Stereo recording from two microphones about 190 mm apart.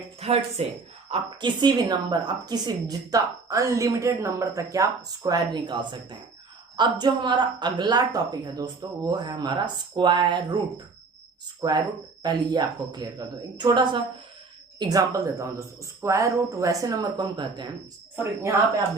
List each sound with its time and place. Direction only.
0.2 s a woman's voice: 30° right (ahead or behind)
11.6 s a woman's voice: 20° right (ahead or behind)